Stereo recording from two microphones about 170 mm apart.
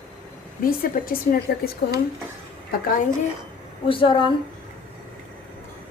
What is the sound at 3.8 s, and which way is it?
Speech, 30° left (ahead or behind).